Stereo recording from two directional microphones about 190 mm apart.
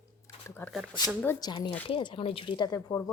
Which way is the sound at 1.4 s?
25° left (ahead or behind).